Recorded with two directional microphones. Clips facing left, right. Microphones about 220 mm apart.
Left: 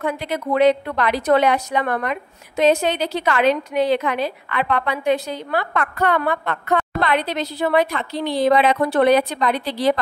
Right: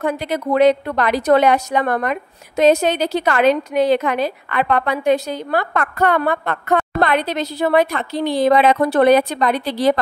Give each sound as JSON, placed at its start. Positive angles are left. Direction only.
{"t": 0.0, "sound": "a woman's voice", "side_deg": -40}